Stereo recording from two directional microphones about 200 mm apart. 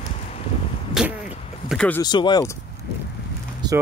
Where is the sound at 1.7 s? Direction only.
5° left (ahead or behind).